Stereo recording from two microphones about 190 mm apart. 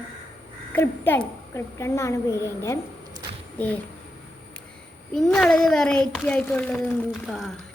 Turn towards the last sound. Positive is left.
turn(degrees=0)  # may be behind; listen again after turning